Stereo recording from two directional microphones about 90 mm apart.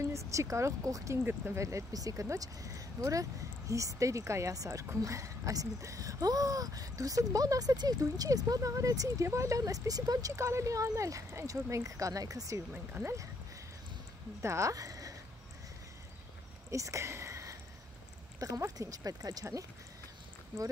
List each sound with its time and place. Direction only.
0.0 s speech: 35° right (ahead or behind)
1.2 s speech: 25° right (ahead or behind)
1.6 s speech: 35° right (ahead or behind)
12.7 s speech: 20° right (ahead or behind)
14.4 s speech: 35° right (ahead or behind)
16.7 s speech: 35° right (ahead or behind)